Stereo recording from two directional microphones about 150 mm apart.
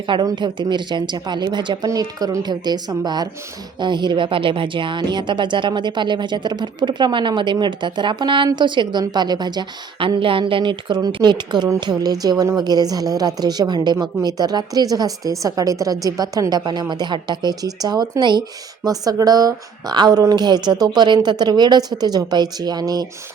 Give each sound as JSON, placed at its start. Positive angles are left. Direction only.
{"t": 0.1, "sound": "speech", "side_deg": -30}